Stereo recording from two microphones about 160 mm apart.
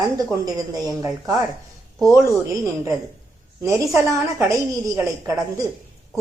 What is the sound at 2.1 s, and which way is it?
Speech, 20° right (ahead or behind).